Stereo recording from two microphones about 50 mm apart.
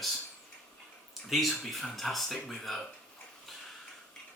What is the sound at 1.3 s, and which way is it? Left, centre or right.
Speech, centre.